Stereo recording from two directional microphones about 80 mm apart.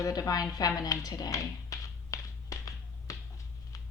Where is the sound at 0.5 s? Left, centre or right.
Left.